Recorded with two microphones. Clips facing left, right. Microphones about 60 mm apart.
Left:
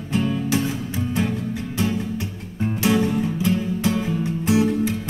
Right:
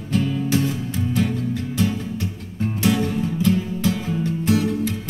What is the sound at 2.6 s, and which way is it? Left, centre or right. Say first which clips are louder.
Music: even; centre.